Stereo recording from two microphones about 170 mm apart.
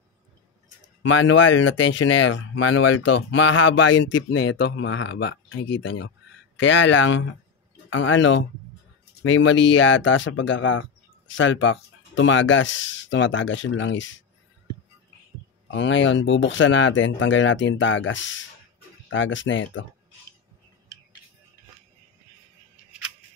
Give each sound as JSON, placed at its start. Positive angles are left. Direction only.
{"t": 1.0, "sound": "speech", "side_deg": 90}
{"t": 15.7, "sound": "speech", "side_deg": 90}